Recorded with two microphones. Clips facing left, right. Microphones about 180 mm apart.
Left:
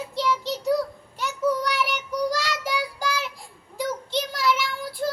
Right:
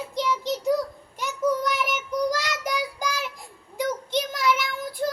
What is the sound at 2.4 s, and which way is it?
Child singing, 15° right (ahead or behind).